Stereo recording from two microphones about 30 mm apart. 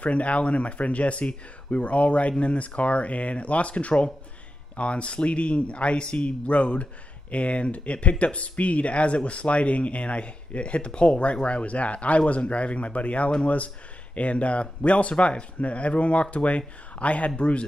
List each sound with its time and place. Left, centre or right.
0.0 s speech: left